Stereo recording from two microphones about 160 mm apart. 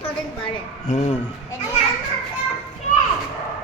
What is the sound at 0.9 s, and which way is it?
Speech, 45° left (ahead or behind).